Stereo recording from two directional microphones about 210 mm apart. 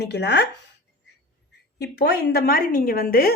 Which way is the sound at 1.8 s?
50° left (ahead or behind).